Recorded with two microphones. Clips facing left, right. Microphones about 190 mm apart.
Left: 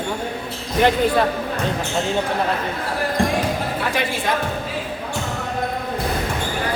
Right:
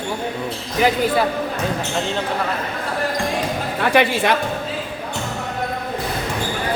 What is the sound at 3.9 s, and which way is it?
Speech, 75° right (ahead or behind).